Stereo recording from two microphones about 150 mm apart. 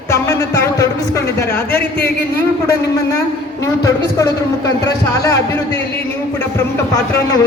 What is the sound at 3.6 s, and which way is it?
A man's voice, 20° left (ahead or behind).